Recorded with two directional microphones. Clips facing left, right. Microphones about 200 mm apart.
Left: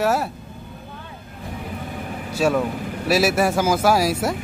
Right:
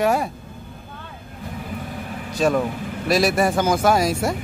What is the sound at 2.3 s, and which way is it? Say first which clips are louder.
Vehicle: even; 5° left (ahead or behind).